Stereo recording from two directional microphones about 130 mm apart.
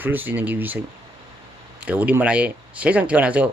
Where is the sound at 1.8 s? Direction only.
10° right (ahead or behind).